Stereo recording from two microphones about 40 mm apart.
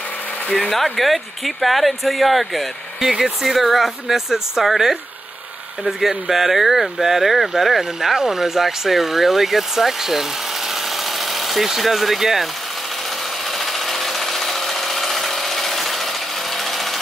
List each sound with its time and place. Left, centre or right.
0.7 s speech: centre
3.0 s speech: centre
10.7 s a sound: centre
13.5 s tools: centre